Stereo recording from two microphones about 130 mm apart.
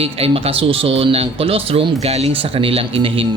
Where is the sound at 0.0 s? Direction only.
50° right (ahead or behind).